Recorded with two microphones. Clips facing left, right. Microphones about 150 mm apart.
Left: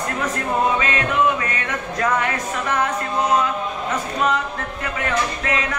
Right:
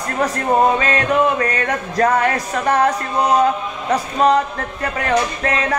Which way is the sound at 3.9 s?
35° right (ahead or behind).